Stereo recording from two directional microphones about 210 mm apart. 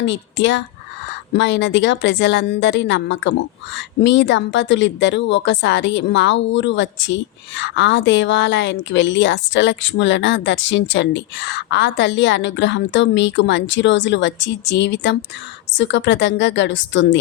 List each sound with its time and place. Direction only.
0.0 s speech: 60° left (ahead or behind)